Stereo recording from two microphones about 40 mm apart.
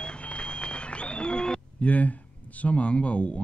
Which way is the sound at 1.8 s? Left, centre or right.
Left.